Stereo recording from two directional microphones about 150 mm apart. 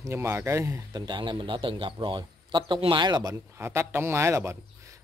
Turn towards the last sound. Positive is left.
turn(degrees=-20)  # may be behind; listen again after turning